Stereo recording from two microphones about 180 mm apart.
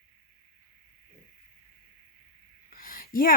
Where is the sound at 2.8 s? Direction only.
50° left (ahead or behind).